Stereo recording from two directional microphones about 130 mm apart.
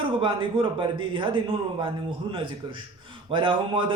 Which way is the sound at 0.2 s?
40° right (ahead or behind).